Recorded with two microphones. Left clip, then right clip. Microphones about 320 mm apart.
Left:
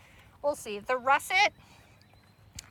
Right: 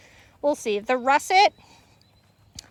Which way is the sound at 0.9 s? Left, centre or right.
Centre.